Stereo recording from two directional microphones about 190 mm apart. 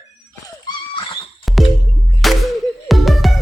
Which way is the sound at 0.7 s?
25° left (ahead or behind).